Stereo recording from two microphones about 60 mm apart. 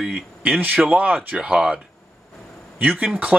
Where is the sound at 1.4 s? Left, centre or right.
Centre.